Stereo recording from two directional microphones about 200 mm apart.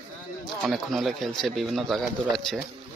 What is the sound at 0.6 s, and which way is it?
Speech, centre (ahead or behind).